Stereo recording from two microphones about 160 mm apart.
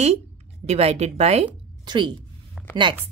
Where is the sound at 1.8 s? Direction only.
30° right (ahead or behind).